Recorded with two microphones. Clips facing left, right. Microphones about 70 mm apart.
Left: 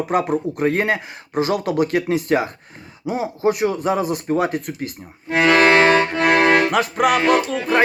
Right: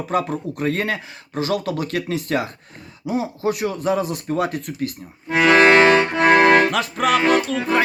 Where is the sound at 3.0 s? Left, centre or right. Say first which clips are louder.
Even; left.